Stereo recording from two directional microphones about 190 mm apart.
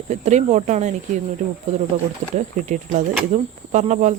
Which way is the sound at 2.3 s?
40° right (ahead or behind).